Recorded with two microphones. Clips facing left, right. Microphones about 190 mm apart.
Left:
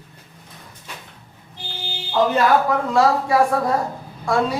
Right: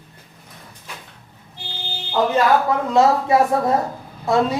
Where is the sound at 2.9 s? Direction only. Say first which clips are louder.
Right 3 dB; 20° right (ahead or behind).